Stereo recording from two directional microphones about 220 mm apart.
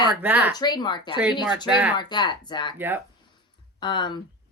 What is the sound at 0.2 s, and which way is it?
Speech, 10° right (ahead or behind).